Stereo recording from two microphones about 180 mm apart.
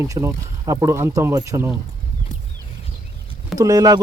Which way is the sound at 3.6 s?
20° right (ahead or behind).